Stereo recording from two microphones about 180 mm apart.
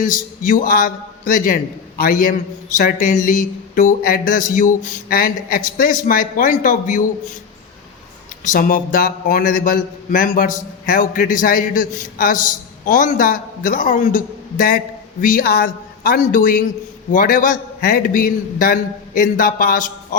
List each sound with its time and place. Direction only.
0.0 s a man's voice: 50° left (ahead or behind)
8.4 s a man's voice: 50° left (ahead or behind)